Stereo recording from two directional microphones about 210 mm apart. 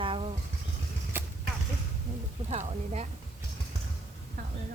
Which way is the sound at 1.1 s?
10° right (ahead or behind).